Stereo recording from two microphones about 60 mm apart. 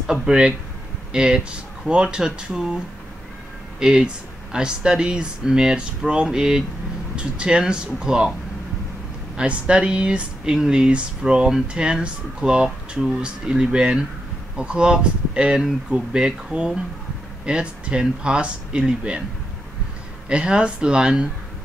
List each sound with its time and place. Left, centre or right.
0.0 s speech: centre
3.8 s speech: centre
9.4 s speech: centre
20.2 s speech: centre